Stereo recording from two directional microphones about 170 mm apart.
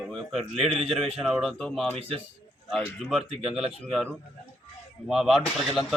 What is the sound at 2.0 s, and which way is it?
Speech, 35° right (ahead or behind).